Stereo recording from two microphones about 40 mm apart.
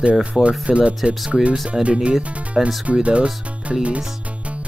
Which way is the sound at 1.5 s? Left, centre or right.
Centre.